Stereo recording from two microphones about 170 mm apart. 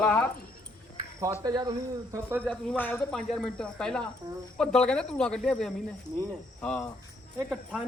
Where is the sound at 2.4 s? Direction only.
10° left (ahead or behind).